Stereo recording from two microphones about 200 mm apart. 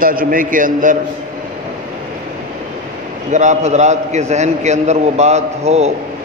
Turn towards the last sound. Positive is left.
turn(degrees=-30)  # may be behind; listen again after turning